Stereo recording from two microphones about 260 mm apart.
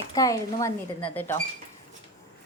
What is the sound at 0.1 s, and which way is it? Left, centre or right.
A woman's voice, centre.